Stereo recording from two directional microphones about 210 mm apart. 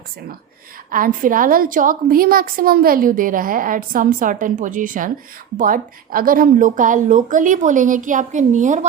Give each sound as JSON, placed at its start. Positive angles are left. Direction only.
{"t": 0.9, "sound": "a woman's voice", "side_deg": -40}